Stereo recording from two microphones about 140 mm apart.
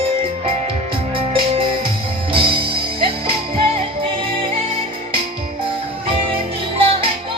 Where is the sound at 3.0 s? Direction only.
40° right (ahead or behind).